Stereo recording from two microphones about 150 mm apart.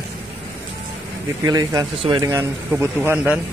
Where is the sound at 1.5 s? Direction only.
25° right (ahead or behind).